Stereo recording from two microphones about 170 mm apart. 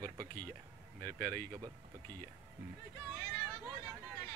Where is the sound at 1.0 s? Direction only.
10° left (ahead or behind).